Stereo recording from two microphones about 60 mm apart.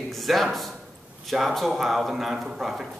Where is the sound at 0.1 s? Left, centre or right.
Centre.